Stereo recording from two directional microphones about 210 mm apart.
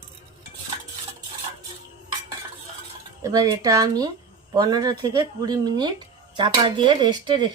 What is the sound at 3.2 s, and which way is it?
Speech, 20° right (ahead or behind).